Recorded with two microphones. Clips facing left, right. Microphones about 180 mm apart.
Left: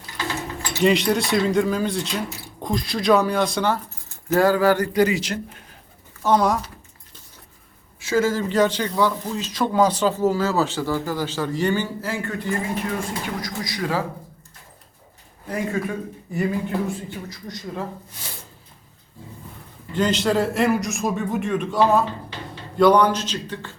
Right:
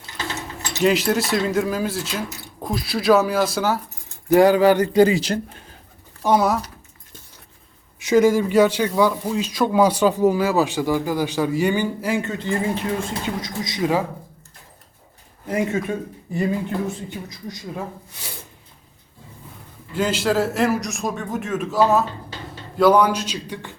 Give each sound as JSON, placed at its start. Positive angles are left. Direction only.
{"t": 0.8, "sound": "speech", "side_deg": 0}
{"t": 3.8, "sound": "speech", "side_deg": -15}
{"t": 6.2, "sound": "speech", "side_deg": -5}
{"t": 7.9, "sound": "speech", "side_deg": -20}
{"t": 15.4, "sound": "speech", "side_deg": -20}
{"t": 17.1, "sound": "speech", "side_deg": -15}
{"t": 19.9, "sound": "speech", "side_deg": -5}